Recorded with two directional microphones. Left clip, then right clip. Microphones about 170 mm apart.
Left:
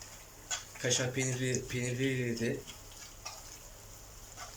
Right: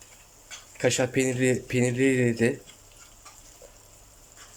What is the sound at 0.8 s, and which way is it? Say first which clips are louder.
Speech: right 10 dB; 55° right (ahead or behind).